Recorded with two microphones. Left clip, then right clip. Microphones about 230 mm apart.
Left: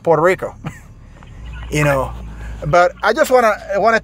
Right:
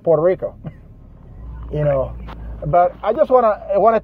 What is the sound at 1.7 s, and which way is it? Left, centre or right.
Speech, left.